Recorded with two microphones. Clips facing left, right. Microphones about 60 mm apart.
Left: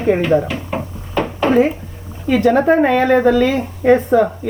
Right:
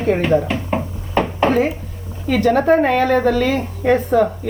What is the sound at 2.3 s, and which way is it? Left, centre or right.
Speech, centre.